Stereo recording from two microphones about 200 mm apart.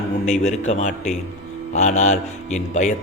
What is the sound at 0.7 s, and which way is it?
A man's voice, 35° left (ahead or behind).